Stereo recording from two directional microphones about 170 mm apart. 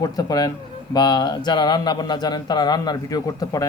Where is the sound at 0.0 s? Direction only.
25° left (ahead or behind).